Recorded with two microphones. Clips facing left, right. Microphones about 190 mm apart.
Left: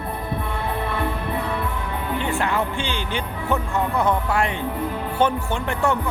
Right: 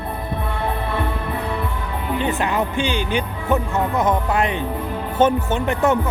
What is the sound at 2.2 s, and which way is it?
Speech, 20° right (ahead or behind).